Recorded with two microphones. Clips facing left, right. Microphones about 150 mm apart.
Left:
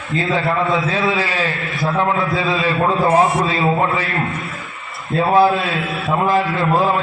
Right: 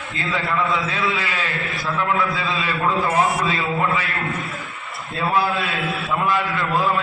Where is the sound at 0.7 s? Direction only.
25° left (ahead or behind); by 2.1 s 40° left (ahead or behind).